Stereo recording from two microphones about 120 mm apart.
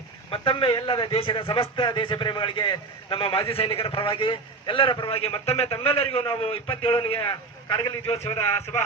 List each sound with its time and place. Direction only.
0.3 s a man's voice: 45° left (ahead or behind)